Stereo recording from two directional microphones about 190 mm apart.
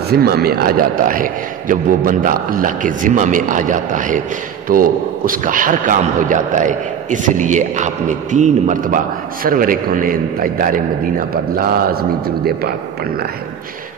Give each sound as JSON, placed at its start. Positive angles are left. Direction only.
{"t": 0.1, "sound": "a man's voice", "side_deg": -55}